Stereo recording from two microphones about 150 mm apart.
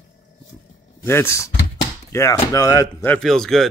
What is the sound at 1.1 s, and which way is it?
Speech, 15° left (ahead or behind).